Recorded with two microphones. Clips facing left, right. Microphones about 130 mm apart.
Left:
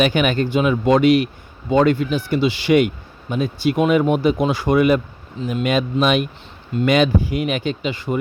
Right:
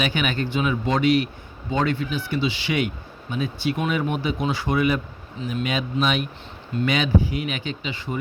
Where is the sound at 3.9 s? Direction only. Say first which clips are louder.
Left 8 dB; 50° left (ahead or behind).